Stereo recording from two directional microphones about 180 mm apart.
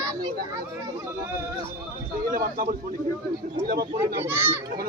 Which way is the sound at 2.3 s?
50° right (ahead or behind).